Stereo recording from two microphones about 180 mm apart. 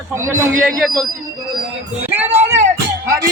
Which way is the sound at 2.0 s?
10° right (ahead or behind).